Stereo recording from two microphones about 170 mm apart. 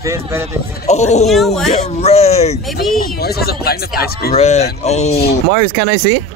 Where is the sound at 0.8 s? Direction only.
40° left (ahead or behind).